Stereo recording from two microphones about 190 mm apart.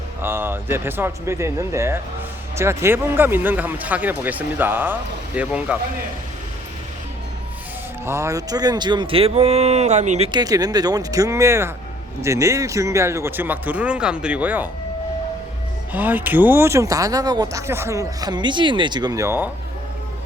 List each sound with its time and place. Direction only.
0.2 s speech: 10° right (ahead or behind)
8.0 s speech: 15° right (ahead or behind); by 10.2 s 35° right (ahead or behind)
10.3 s speech: 20° right (ahead or behind)
15.9 s speech: 10° right (ahead or behind)